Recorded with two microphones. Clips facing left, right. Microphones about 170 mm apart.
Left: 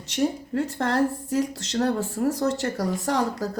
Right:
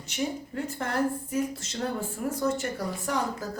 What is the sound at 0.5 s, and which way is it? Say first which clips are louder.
Speech: left 6 dB; 80° left.